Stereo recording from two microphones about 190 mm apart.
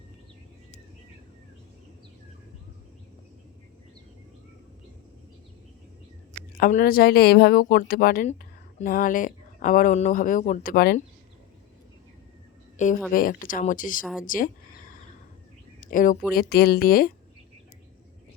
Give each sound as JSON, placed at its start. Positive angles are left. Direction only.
{"t": 6.6, "sound": "speech", "side_deg": 45}
{"t": 12.7, "sound": "speech", "side_deg": 40}
{"t": 14.3, "sound": "a sound", "side_deg": 45}
{"t": 15.8, "sound": "speech", "side_deg": 45}